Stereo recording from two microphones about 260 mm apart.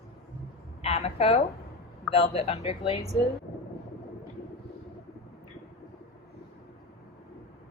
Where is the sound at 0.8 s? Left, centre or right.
Left.